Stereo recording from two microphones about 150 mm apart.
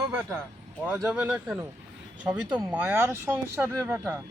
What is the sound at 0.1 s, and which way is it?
Speech, 10° right (ahead or behind).